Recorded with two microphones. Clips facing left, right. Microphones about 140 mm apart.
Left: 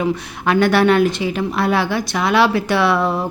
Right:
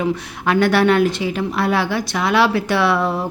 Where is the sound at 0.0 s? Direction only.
25° left (ahead or behind).